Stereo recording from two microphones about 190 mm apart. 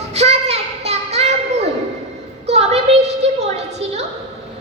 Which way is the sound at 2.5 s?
35° right (ahead or behind).